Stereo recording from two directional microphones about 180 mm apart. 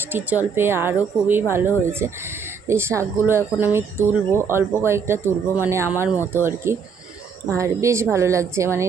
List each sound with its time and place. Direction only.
0.1 s speech: 10° right (ahead or behind)